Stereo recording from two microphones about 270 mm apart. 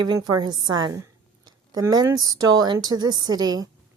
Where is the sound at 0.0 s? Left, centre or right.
Centre.